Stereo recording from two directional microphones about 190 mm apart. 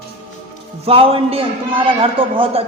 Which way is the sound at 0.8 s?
30° right (ahead or behind).